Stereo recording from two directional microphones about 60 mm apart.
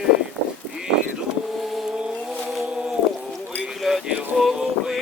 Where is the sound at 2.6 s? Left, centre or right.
Centre.